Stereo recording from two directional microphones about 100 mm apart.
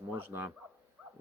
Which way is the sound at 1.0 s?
10° right (ahead or behind).